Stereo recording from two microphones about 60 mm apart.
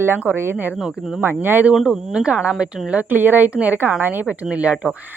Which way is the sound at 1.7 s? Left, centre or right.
Centre.